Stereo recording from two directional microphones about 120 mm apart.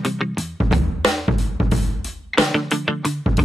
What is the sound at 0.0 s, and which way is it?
Music, centre (ahead or behind).